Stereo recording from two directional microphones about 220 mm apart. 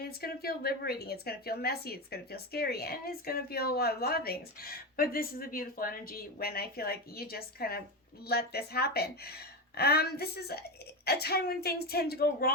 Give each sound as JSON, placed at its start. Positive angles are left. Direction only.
{"t": 0.0, "sound": "speech", "side_deg": 45}